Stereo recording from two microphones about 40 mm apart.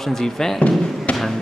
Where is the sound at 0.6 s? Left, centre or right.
Left.